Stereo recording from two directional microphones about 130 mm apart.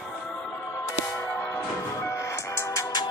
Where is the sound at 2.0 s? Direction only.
25° left (ahead or behind).